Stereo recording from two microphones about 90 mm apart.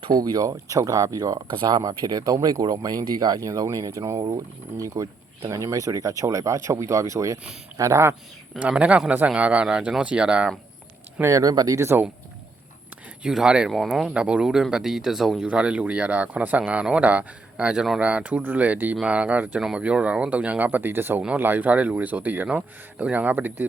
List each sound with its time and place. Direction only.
0.1 s speech: 45° right (ahead or behind)
1.4 s speech: 65° right (ahead or behind); by 8.1 s 35° right (ahead or behind)
8.5 s speech: 15° right (ahead or behind)
11.2 s speech: 35° right (ahead or behind)
11.8 s speech: 25° right (ahead or behind)
13.2 s speech: 5° right (ahead or behind)